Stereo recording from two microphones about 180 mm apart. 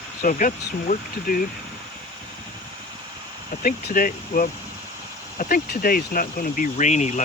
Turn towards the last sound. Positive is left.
turn(degrees=40)  # may be behind; listen again after turning